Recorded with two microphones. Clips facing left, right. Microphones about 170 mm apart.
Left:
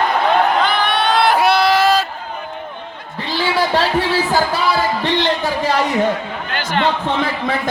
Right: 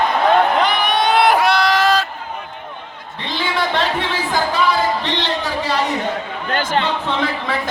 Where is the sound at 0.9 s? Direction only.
15° right (ahead or behind).